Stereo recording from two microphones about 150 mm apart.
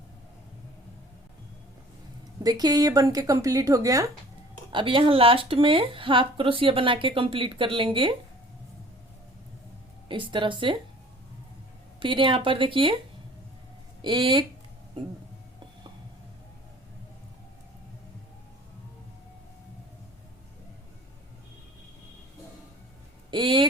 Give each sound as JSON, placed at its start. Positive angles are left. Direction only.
{"t": 2.4, "sound": "speech", "side_deg": -25}
{"t": 4.7, "sound": "a woman's voice", "side_deg": -35}
{"t": 10.1, "sound": "a woman's voice", "side_deg": -30}
{"t": 11.9, "sound": "a woman's voice", "side_deg": -35}
{"t": 14.0, "sound": "a woman's voice", "side_deg": -35}
{"t": 23.3, "sound": "a woman's voice", "side_deg": -35}